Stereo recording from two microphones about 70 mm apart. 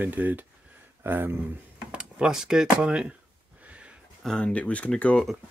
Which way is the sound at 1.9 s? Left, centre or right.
Centre.